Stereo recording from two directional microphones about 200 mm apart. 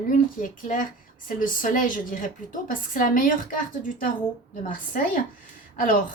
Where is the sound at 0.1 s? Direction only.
40° left (ahead or behind).